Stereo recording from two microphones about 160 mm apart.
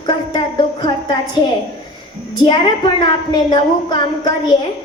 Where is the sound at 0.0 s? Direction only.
25° left (ahead or behind).